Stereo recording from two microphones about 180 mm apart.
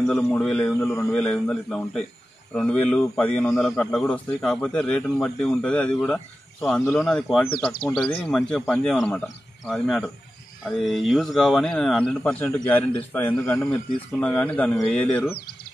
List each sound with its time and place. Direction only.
0.0 s speech: 5° left (ahead or behind)
7.8 s speech: 25° left (ahead or behind)
8.2 s speech: 5° left (ahead or behind)